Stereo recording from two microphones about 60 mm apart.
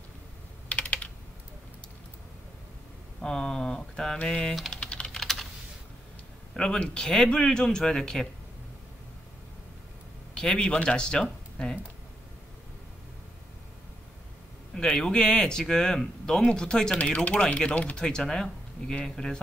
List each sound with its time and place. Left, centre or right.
0.7 s typing: left
3.2 s speech: centre
4.7 s typing: centre
5.2 s computer keyboard: centre
6.5 s speech: centre
10.3 s speech: centre
14.7 s speech: centre
17.0 s speech: left
17.3 s speech: centre